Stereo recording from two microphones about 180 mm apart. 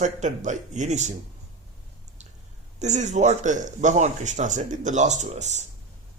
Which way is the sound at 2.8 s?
40° right (ahead or behind).